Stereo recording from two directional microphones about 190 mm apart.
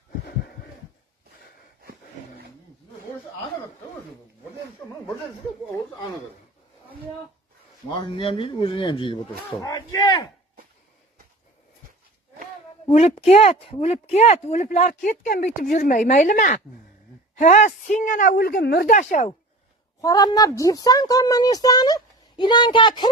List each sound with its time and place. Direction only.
7.9 s speech: 25° left (ahead or behind)
12.9 s speech: 35° left (ahead or behind)
20.0 s speech: 20° left (ahead or behind)